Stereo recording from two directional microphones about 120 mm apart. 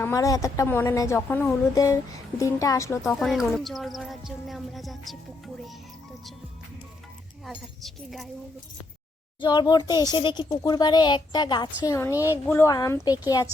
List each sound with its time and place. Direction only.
0.0 s a woman's voice: 25° left (ahead or behind)
1.7 s a woman's voice: 30° left (ahead or behind)
3.0 s speech: centre (ahead or behind)
7.4 s speech: centre (ahead or behind)
9.4 s a woman's voice: 40° left (ahead or behind)
11.8 s a woman's voice: 25° left (ahead or behind)